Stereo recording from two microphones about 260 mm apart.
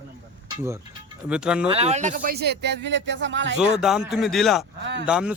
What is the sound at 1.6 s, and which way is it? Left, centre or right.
Speech, right.